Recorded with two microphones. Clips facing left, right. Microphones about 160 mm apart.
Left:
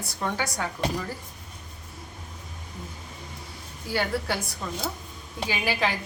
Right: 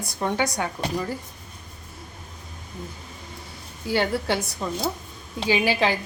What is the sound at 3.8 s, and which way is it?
A woman's voice, 25° right (ahead or behind).